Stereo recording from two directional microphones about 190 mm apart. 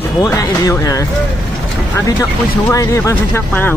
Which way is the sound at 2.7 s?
15° left (ahead or behind).